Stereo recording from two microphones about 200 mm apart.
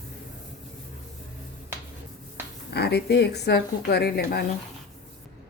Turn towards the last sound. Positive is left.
turn(degrees=55)  # may be behind; listen again after turning